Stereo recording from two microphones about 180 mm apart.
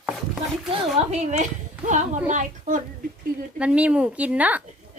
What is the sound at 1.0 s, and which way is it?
Speech, 35° right (ahead or behind).